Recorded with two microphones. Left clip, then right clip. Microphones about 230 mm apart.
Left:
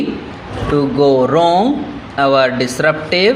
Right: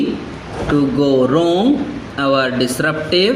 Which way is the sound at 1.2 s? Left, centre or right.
Left.